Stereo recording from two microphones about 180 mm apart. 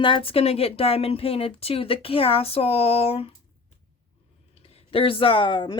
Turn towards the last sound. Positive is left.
turn(degrees=25)  # may be behind; listen again after turning